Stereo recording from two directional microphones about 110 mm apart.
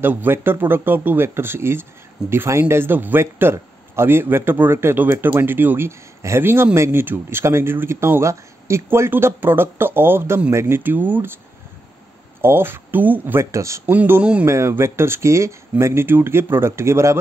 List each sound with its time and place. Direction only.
0.0 s a man's voice: 20° right (ahead or behind)
12.4 s a man's voice: 20° right (ahead or behind)